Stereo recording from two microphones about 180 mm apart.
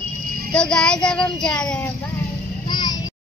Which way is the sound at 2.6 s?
25° left (ahead or behind).